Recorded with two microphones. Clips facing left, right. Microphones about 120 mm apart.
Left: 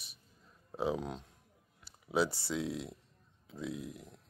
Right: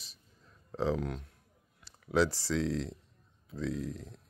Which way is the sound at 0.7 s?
10° left (ahead or behind).